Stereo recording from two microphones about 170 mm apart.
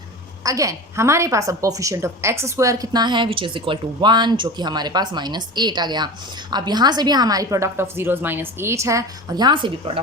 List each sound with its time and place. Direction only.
0.4 s a woman's voice: 20° right (ahead or behind)